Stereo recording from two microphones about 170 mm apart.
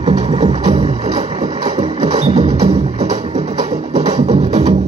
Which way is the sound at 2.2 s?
30° right (ahead or behind).